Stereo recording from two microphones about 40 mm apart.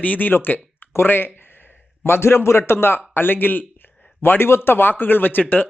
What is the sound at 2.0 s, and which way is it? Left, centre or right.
Speech, left.